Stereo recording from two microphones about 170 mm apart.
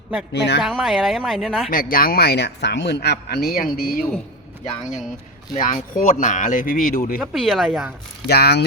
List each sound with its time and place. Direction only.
0.3 s speech: 85° left
0.6 s speech: 5° right (ahead or behind)
1.7 s speech: 55° left (ahead or behind)
5.5 s speech: 50° left (ahead or behind)
7.2 s speech: centre (ahead or behind)
8.3 s speech: 70° left (ahead or behind)